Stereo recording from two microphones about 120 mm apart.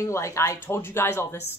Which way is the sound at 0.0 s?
25° left (ahead or behind).